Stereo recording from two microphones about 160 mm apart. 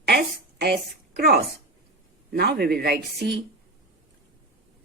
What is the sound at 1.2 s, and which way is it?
Speech, 75° right (ahead or behind).